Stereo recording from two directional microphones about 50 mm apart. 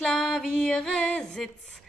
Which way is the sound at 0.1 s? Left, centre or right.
Centre.